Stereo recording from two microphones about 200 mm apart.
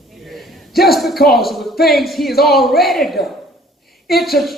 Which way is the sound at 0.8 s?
Centre (ahead or behind).